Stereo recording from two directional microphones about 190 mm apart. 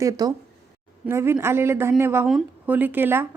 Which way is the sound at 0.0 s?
15° right (ahead or behind).